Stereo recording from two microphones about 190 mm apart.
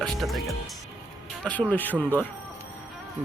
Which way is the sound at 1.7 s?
10° left (ahead or behind).